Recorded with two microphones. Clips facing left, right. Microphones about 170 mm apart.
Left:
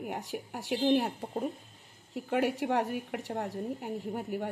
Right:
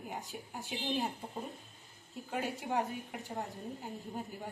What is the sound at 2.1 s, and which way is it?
Speech, 75° left (ahead or behind).